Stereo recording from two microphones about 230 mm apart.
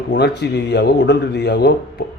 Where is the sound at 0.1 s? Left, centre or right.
Left.